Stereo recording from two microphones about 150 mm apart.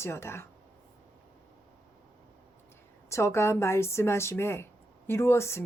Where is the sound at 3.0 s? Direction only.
20° left (ahead or behind).